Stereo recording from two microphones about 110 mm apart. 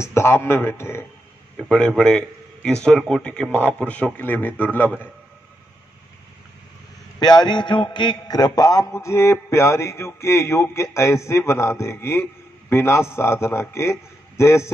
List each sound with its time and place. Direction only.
0.0 s a man's voice: 25° left (ahead or behind)
1.6 s a man's voice: 10° left (ahead or behind)
7.2 s a man's voice: 40° left (ahead or behind)